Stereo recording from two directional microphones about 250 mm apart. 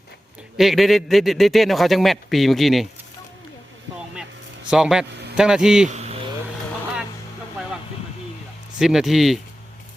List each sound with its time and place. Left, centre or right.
0.5 s a man's voice: centre
4.7 s a man's voice: centre
5.9 s vehicle: right
8.8 s a man's voice: centre